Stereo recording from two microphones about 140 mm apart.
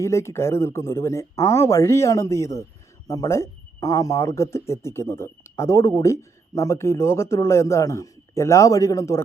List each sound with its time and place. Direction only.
0.0 s speech: 20° left (ahead or behind)